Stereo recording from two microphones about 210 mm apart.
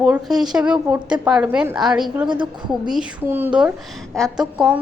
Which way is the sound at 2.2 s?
20° right (ahead or behind).